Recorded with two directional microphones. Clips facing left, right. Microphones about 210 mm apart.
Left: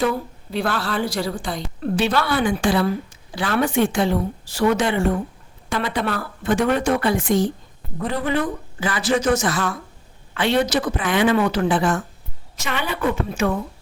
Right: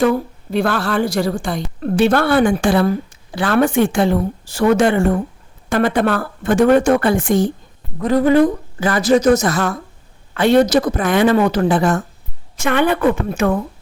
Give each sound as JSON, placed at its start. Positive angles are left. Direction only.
{"t": 0.0, "sound": "a woman's voice", "side_deg": -50}
{"t": 12.5, "sound": "a woman's voice", "side_deg": -55}